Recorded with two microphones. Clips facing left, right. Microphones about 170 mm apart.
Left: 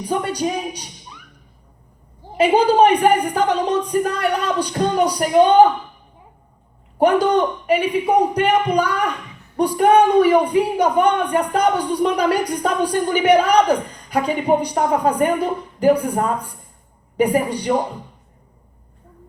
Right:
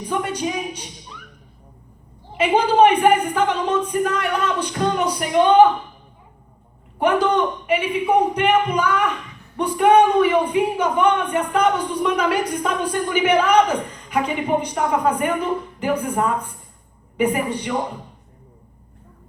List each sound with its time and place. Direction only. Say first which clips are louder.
0.1 s a woman's voice: left 2 dB; 40° left (ahead or behind)
2.4 s a woman's voice: left 2 dB; 35° left (ahead or behind)
7.0 s a woman's voice: left 3 dB; 40° left (ahead or behind)